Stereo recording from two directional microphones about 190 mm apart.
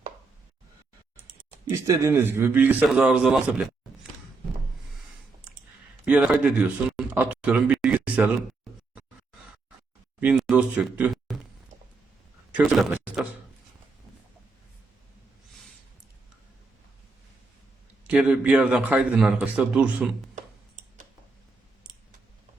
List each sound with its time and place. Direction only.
1.1 s clicking: 45° right (ahead or behind)
1.9 s a man's voice: 15° right (ahead or behind)
6.1 s speech: 5° right (ahead or behind)
10.2 s speech: 5° right (ahead or behind)
12.5 s speech: 5° right (ahead or behind)
18.1 s a man's voice: 5° right (ahead or behind)
20.3 s tick-tock: 40° right (ahead or behind)